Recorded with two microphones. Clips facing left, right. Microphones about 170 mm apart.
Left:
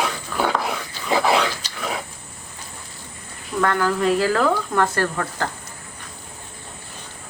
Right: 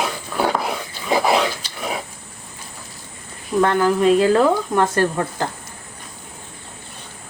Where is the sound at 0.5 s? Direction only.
10° right (ahead or behind).